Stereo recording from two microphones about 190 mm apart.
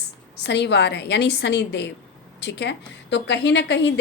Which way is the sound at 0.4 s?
65° left (ahead or behind).